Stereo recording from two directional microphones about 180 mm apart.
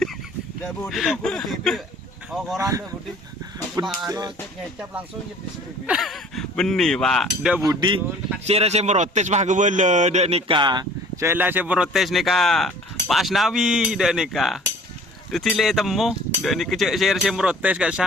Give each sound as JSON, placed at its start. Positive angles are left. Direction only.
{"t": 0.6, "sound": "speech", "side_deg": 5}
{"t": 2.6, "sound": "speech", "side_deg": -20}
{"t": 5.8, "sound": "speech", "side_deg": -5}
{"t": 7.6, "sound": "speech", "side_deg": -20}
{"t": 8.4, "sound": "a man's voice", "side_deg": -35}
{"t": 11.3, "sound": "speech", "side_deg": -10}